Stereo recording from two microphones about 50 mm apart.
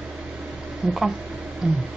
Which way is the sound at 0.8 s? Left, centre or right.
Centre.